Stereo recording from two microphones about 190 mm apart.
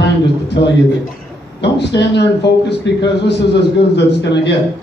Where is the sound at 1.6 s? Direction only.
65° left (ahead or behind).